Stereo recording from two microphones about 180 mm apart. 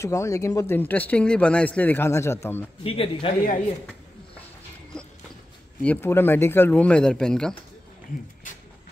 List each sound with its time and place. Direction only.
0.0 s speech: 15° left (ahead or behind)
2.8 s a man's voice: 30° left (ahead or behind)
4.9 s clip-clop: 5° left (ahead or behind)
5.8 s speech: 10° left (ahead or behind)
8.5 s a sound: 45° left (ahead or behind)